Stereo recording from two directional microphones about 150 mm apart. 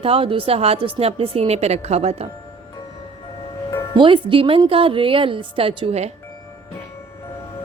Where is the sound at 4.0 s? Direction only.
35° right (ahead or behind).